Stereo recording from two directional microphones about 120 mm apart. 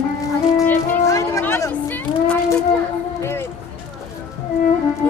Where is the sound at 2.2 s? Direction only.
10° left (ahead or behind).